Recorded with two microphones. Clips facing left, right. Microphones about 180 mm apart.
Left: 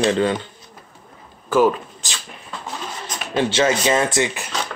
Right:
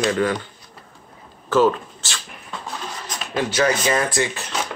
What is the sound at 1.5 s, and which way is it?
Speech, 10° left (ahead or behind).